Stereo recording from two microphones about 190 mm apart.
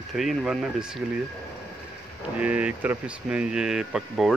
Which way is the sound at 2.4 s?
5° right (ahead or behind).